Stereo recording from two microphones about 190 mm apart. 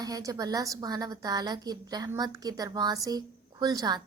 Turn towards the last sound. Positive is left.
turn(degrees=-20)  # may be behind; listen again after turning